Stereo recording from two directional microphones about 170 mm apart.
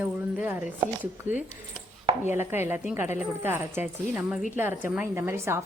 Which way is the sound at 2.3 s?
10° right (ahead or behind).